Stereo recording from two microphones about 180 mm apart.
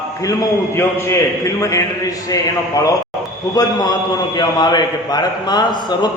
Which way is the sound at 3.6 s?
20° left (ahead or behind).